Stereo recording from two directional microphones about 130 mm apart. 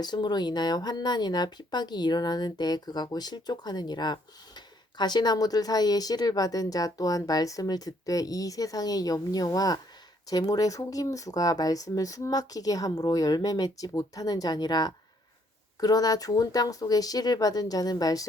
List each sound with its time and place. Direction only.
0.0 s speech: 35° left (ahead or behind)